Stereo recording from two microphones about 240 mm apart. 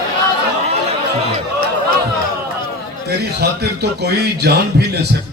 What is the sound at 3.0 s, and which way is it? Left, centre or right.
A man's voice, right.